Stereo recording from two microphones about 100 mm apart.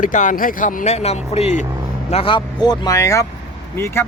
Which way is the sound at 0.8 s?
90° left.